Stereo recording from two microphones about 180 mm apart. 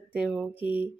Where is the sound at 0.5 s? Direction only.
30° left (ahead or behind).